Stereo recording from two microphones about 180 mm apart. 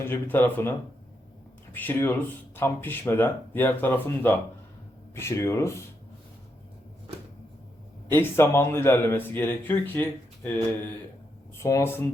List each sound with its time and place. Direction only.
0.0 s speech: 10° left (ahead or behind)
1.7 s speech: 10° left (ahead or behind)
8.1 s speech: 15° left (ahead or behind)
11.5 s speech: 15° left (ahead or behind)